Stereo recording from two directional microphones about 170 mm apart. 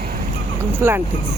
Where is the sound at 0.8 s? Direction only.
15° right (ahead or behind).